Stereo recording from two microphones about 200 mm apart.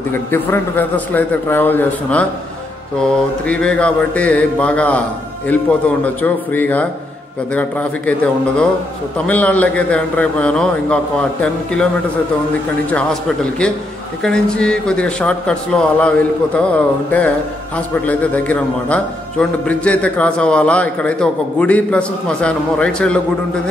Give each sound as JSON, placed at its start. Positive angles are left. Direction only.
{"t": 0.1, "sound": "a man's voice", "side_deg": 10}
{"t": 9.2, "sound": "a man's voice", "side_deg": 5}
{"t": 12.9, "sound": "a man's voice", "side_deg": 5}